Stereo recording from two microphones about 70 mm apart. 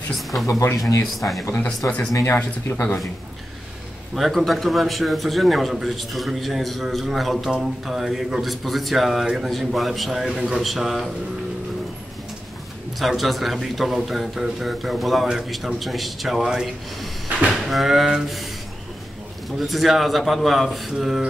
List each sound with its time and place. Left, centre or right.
0.1 s a man's voice: centre
0.5 s speech: left
1.0 s a man's voice: centre
1.8 s speech: left
4.1 s a man's voice: centre
13.0 s a man's voice: centre
19.6 s a man's voice: centre